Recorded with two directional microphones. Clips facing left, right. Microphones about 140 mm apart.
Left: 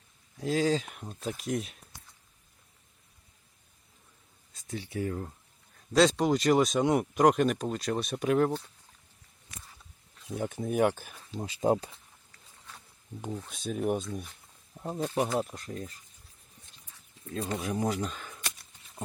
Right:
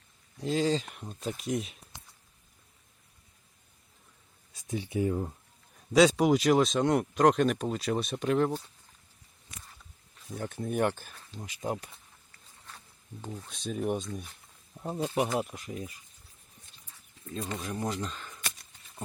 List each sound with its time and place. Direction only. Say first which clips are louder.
0.3 s speech: left 1 dB; centre (ahead or behind)
4.7 s speech: right 4 dB; 15° right (ahead or behind)
5.9 s speech: right 2 dB; 5° right (ahead or behind)
10.3 s speech: left 2 dB; 5° left (ahead or behind)
11.3 s speech: left 8 dB; 30° left (ahead or behind)
13.4 s speech: even; centre (ahead or behind)
17.6 s speech: left 4 dB; 10° left (ahead or behind)